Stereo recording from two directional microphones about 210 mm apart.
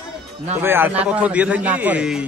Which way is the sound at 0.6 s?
10° right (ahead or behind).